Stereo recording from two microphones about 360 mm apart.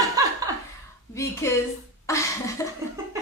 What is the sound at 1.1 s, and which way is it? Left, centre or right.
A woman's voice, centre.